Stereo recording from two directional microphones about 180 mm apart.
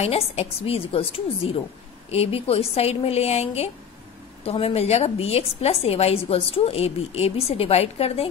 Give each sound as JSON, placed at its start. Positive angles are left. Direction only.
{"t": 0.0, "sound": "a woman's voice", "side_deg": 35}